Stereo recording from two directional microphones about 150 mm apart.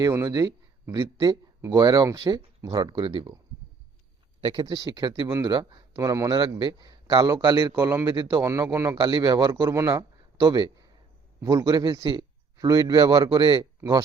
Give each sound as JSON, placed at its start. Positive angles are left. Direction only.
{"t": 0.0, "sound": "speech", "side_deg": -20}
{"t": 4.4, "sound": "speech", "side_deg": -30}
{"t": 7.8, "sound": "speech", "side_deg": -15}
{"t": 9.0, "sound": "speech", "side_deg": -30}
{"t": 10.4, "sound": "speech", "side_deg": -30}